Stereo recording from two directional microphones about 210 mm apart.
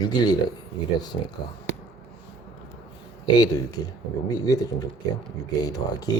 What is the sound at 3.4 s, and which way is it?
Speech, 20° left (ahead or behind).